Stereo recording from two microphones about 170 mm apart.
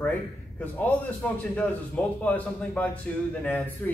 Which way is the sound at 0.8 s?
10° left (ahead or behind).